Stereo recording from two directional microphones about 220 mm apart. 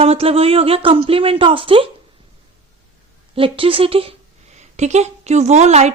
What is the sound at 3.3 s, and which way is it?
Speech, 25° right (ahead or behind).